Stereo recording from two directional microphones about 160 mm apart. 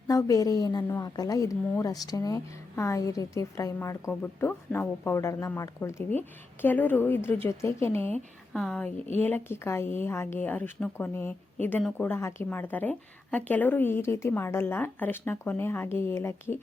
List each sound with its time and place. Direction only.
0.1 s a woman's voice: 20° left (ahead or behind)